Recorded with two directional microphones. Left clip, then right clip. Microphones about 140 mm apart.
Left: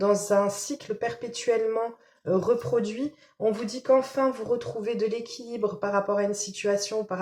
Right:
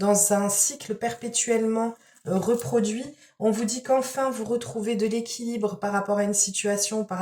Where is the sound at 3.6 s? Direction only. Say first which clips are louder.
Left 1 dB; 45° left (ahead or behind).